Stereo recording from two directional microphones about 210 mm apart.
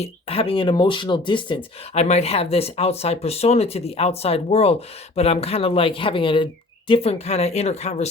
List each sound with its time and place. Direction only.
0.0 s speech: 25° left (ahead or behind)